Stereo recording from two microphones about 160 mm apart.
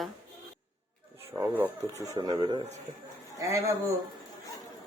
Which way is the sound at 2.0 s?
25° right (ahead or behind).